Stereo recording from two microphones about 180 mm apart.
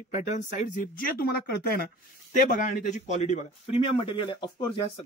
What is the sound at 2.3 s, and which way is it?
A man's voice, 45° left (ahead or behind).